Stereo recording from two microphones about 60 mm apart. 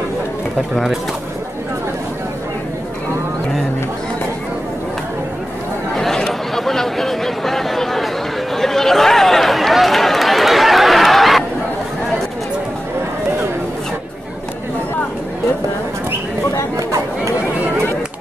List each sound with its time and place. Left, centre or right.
5.9 s chatter: centre
8.5 s a sound: centre
16.7 s chatter: right